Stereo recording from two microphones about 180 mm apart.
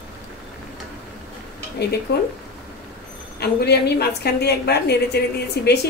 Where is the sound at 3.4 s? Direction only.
65° left (ahead or behind).